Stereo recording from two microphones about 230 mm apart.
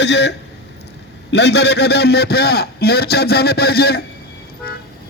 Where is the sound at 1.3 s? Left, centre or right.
Left.